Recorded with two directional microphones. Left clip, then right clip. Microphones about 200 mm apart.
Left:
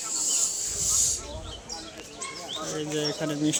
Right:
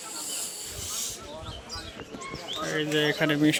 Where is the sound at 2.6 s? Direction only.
Centre (ahead or behind).